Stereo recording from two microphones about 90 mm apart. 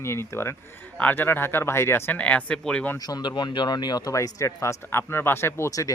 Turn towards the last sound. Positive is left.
turn(degrees=40)  # may be behind; listen again after turning